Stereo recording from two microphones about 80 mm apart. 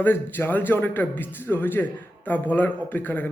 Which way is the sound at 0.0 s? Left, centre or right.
Left.